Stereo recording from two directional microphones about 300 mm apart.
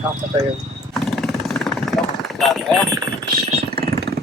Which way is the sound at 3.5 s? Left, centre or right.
Right.